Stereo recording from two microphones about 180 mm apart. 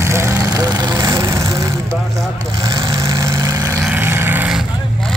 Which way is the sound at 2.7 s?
20° right (ahead or behind).